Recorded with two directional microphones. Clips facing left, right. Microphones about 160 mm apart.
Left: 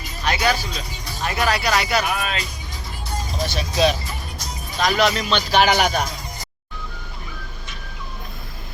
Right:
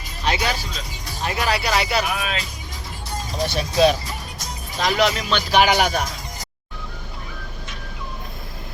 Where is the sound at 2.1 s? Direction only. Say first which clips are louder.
Left 1 dB; 5° right (ahead or behind).